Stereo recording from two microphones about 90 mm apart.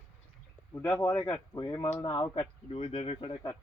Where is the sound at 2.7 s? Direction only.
90° left.